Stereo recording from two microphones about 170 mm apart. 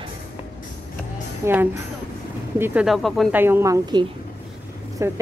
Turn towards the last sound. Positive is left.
turn(degrees=-15)  # may be behind; listen again after turning